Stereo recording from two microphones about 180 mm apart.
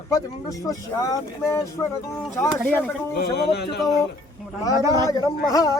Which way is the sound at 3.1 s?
65° left (ahead or behind).